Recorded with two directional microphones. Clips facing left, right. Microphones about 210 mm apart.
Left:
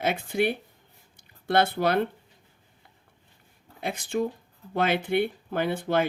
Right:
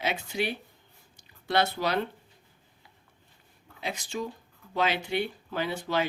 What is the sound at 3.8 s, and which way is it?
Speech, 55° left (ahead or behind).